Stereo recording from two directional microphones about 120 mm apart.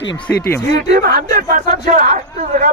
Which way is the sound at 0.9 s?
90° right.